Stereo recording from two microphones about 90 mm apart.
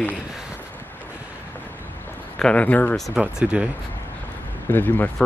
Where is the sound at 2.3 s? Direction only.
15° left (ahead or behind).